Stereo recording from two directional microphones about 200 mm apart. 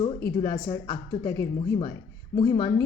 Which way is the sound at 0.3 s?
20° left (ahead or behind).